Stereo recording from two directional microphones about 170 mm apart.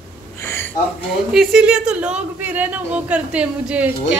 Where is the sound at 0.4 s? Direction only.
15° left (ahead or behind).